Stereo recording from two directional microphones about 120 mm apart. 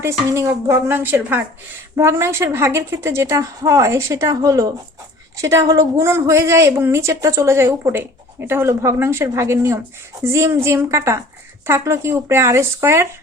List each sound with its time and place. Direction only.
0.0 s a woman's voice: 25° right (ahead or behind)